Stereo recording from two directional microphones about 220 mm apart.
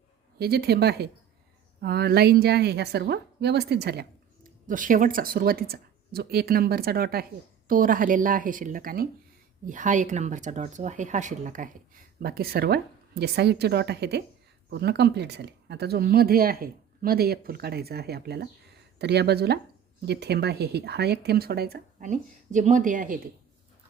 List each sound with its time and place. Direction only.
0.3 s speech: 45° right (ahead or behind)
4.4 s speech: 35° right (ahead or behind)